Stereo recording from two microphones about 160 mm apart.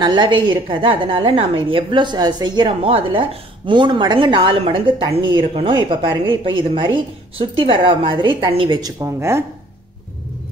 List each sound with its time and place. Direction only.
0.0 s a woman's voice: 30° right (ahead or behind)